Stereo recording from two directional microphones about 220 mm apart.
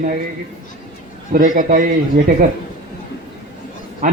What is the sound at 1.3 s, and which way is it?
Speech, 35° right (ahead or behind).